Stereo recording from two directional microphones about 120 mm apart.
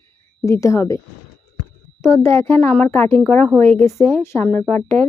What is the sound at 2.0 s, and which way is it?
A woman's voice, 20° left (ahead or behind).